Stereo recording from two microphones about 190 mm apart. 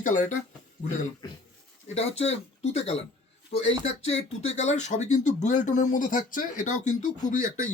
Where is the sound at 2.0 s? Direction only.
35° left (ahead or behind).